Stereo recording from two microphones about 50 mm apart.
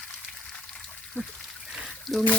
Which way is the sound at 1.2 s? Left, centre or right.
Left.